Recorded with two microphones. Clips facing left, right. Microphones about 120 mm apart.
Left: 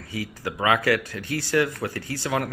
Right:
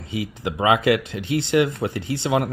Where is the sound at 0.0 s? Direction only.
20° right (ahead or behind).